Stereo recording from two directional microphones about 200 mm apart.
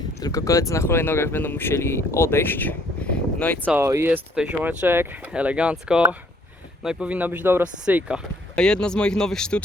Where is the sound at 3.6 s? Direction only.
10° right (ahead or behind).